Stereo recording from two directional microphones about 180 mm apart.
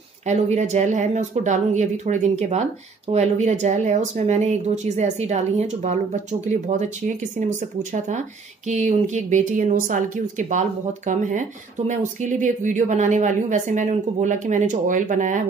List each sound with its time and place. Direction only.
0.3 s speech: 40° right (ahead or behind)
11.9 s speech: 45° right (ahead or behind)